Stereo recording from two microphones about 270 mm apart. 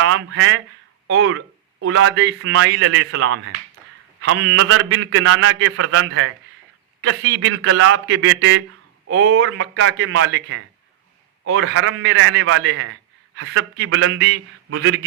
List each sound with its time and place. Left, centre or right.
0.0 s a man's voice: right
4.5 s a man's voice: right